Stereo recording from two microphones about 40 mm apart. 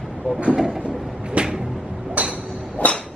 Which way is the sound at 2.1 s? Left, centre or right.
Right.